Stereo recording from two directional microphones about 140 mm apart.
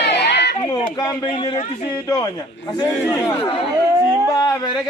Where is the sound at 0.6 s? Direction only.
25° left (ahead or behind).